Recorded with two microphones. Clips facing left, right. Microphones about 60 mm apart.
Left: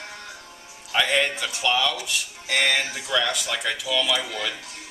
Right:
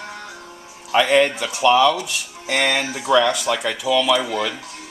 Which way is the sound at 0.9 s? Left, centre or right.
Centre.